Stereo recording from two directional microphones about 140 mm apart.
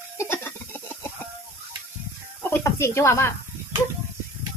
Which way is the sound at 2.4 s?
15° left (ahead or behind).